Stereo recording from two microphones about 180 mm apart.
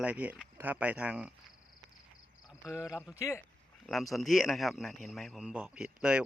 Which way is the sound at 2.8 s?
5° right (ahead or behind).